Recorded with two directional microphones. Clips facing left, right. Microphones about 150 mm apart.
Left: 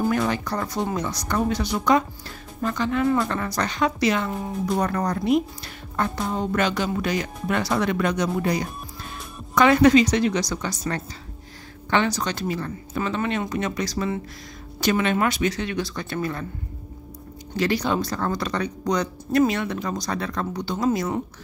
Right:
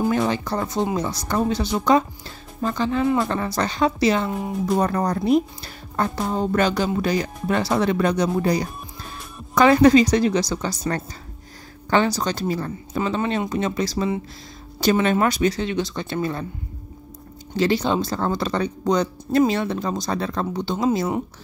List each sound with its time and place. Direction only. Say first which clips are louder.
0.0 s a woman's voice: right 2 dB; 25° right (ahead or behind)
17.6 s speech: right 3 dB; 25° right (ahead or behind)